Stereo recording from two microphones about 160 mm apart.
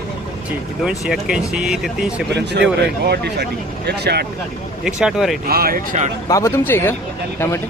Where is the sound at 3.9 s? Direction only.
90° right.